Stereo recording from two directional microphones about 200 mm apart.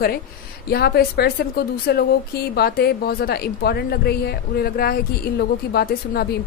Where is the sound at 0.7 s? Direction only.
50° left (ahead or behind).